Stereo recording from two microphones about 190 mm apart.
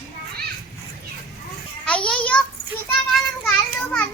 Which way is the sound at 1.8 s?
5° left (ahead or behind).